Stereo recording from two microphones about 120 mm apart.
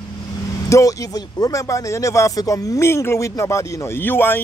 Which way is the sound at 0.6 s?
25° left (ahead or behind).